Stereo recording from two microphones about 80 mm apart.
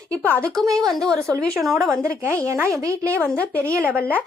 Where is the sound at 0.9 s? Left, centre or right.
Centre.